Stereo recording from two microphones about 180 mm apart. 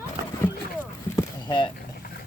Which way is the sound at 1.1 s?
25° left (ahead or behind).